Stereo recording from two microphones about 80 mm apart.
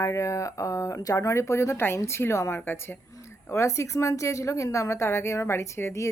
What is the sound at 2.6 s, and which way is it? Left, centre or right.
Speech, left.